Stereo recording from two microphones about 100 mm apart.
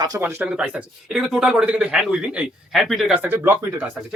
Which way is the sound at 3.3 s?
20° right (ahead or behind).